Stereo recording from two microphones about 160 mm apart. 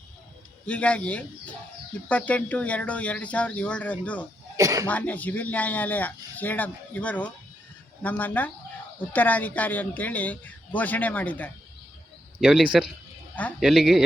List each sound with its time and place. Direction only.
0.6 s speech: 5° left (ahead or behind)
4.5 s speech: 20° right (ahead or behind)
4.9 s speech: 10° left (ahead or behind)
12.4 s speech: 5° right (ahead or behind)